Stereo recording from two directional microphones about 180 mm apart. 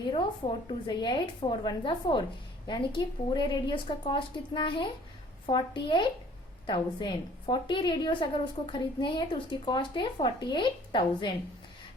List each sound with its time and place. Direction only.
0.1 s a woman's voice: 30° left (ahead or behind)